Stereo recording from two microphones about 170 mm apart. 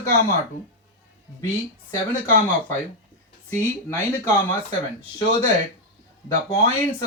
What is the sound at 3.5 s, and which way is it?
Speech, 10° left (ahead or behind).